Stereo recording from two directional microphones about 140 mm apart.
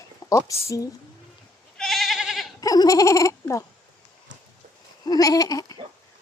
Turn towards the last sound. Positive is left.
turn(degrees=25)  # may be behind; listen again after turning